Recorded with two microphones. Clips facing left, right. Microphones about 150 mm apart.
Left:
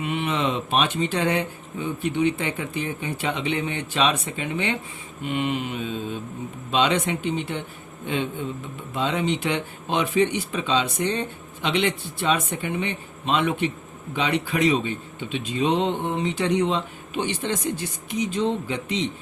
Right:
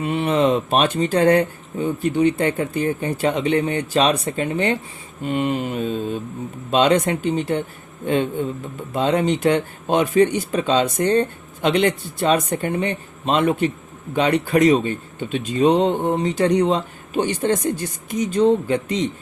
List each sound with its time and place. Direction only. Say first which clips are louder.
0.0 s a man's voice: right 6 dB; 40° right (ahead or behind)